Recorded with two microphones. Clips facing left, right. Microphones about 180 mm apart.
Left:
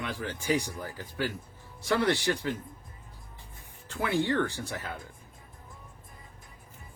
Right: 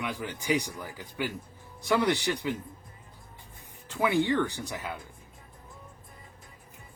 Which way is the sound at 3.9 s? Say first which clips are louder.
Right 2 dB; 20° right (ahead or behind).